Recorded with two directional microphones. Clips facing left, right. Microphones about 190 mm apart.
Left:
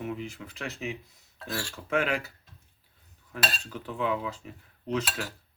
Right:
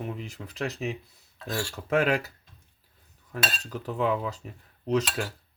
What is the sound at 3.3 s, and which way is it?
Speech, 40° right (ahead or behind).